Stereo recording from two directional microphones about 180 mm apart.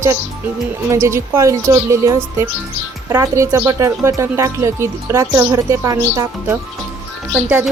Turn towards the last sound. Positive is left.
turn(degrees=-10)  # may be behind; listen again after turning